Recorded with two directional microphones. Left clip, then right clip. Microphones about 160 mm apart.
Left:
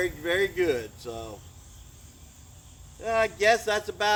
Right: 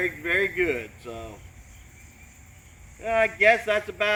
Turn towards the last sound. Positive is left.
turn(degrees=20)  # may be behind; listen again after turning